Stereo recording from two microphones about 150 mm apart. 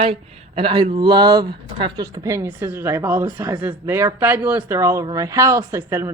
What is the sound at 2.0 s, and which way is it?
A man's voice, 20° right (ahead or behind).